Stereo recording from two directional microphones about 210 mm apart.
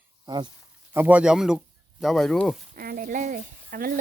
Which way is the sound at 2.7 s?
45° right (ahead or behind).